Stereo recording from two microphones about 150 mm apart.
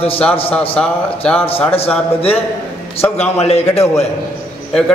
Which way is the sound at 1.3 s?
40° left (ahead or behind).